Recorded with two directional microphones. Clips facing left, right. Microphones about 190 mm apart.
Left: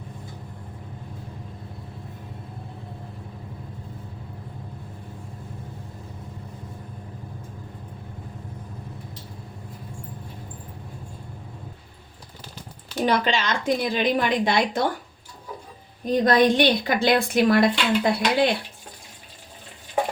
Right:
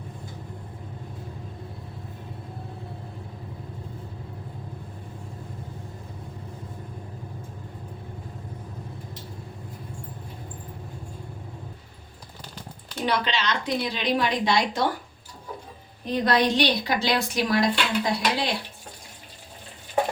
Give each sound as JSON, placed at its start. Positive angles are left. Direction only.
{"t": 13.1, "sound": "a woman's voice", "side_deg": 45}
{"t": 16.0, "sound": "a woman's voice", "side_deg": 50}